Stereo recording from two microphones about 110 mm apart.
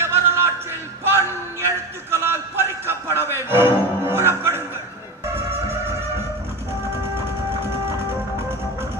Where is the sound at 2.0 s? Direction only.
25° right (ahead or behind).